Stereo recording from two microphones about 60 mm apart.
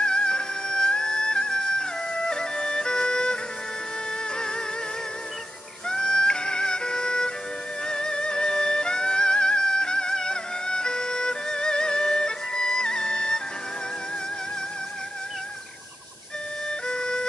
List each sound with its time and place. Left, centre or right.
0.0 s music: centre
4.4 s music: centre
5.9 s music: centre
16.6 s music: centre